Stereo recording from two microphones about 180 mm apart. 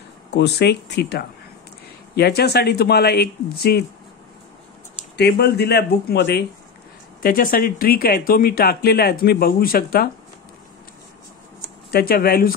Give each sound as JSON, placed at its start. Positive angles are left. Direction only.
{"t": 0.3, "sound": "speech", "side_deg": 70}
{"t": 5.1, "sound": "speech", "side_deg": 70}
{"t": 7.2, "sound": "speech", "side_deg": 55}
{"t": 11.9, "sound": "speech", "side_deg": 55}